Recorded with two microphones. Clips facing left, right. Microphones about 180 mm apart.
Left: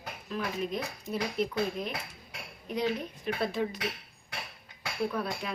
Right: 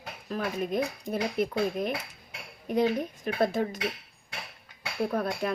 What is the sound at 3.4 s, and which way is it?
Speech, 45° right (ahead or behind).